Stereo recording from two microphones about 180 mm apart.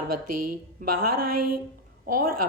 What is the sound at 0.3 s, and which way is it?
A woman's voice, 55° right (ahead or behind).